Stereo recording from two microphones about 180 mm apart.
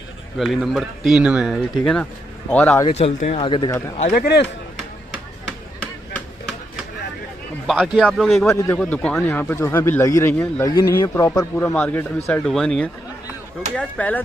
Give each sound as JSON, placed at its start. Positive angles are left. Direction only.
{"t": 0.4, "sound": "a man's voice", "side_deg": 0}
{"t": 2.9, "sound": "speech", "side_deg": 35}
{"t": 4.0, "sound": "speech", "side_deg": 50}
{"t": 7.6, "sound": "speech", "side_deg": 0}
{"t": 8.5, "sound": "a man's voice", "side_deg": 10}
{"t": 11.5, "sound": "a man's voice", "side_deg": 5}